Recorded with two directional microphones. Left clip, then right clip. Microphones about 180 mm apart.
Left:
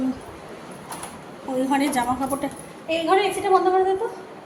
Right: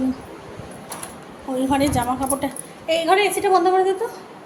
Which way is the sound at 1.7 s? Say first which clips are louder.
Right 2 dB; 5° right (ahead or behind).